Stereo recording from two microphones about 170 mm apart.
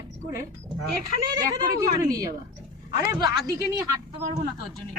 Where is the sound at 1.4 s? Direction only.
20° right (ahead or behind).